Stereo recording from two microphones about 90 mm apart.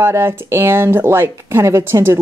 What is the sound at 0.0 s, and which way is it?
Speech, 30° right (ahead or behind).